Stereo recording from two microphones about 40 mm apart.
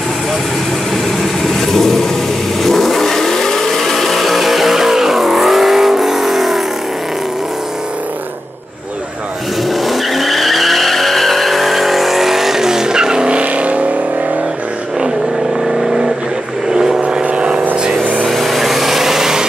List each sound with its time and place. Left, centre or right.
1.4 s vehicle: centre
9.7 s vehicle: centre
13.4 s vehicle: right
15.6 s vehicle: centre
17.0 s vehicle: right
18.2 s vehicle: centre